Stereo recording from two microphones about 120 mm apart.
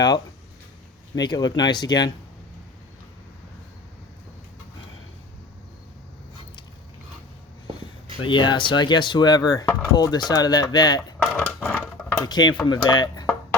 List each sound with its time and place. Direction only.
1.1 s speech: 35° left (ahead or behind)
8.2 s speech: 40° left (ahead or behind)
11.2 s a sound: 10° left (ahead or behind)
12.2 s speech: 35° left (ahead or behind)